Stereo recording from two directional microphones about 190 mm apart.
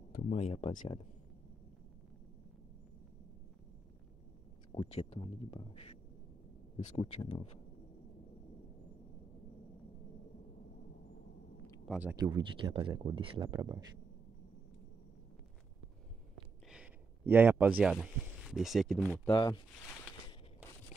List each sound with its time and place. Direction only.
0.1 s speech: 40° left (ahead or behind)
4.7 s speech: 35° left (ahead or behind)
7.0 s speech: 30° left (ahead or behind)
12.2 s speech: 25° right (ahead or behind)
16.7 s a sound: 10° right (ahead or behind)
17.9 s speech: centre (ahead or behind)
19.3 s speech: 20° left (ahead or behind)